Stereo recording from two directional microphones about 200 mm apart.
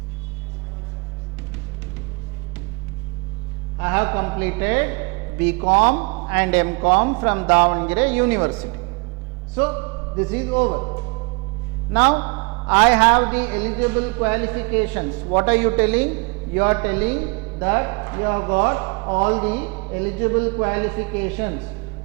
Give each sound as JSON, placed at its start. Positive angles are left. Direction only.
{"t": 3.8, "sound": "a man's voice", "side_deg": -15}
{"t": 10.8, "sound": "speech", "side_deg": -25}
{"t": 11.9, "sound": "a man's voice", "side_deg": -10}